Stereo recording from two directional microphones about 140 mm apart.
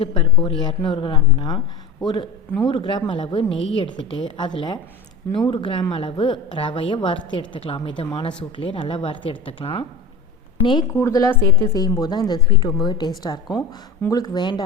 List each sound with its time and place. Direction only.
0.0 s a sound: 40° left (ahead or behind)
0.6 s a woman's voice: 35° left (ahead or behind)
10.9 s a woman's voice: 20° left (ahead or behind)